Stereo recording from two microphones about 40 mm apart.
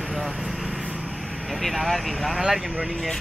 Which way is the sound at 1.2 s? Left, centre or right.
Centre.